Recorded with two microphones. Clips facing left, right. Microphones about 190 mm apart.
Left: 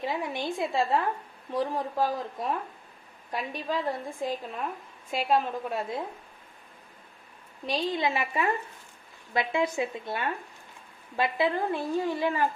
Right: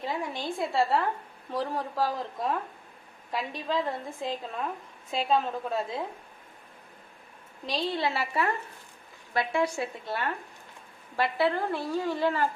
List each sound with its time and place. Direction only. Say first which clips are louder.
0.0 s a woman's voice: left 2 dB; 20° left (ahead or behind)
7.7 s a woman's voice: left 1 dB; 15° left (ahead or behind)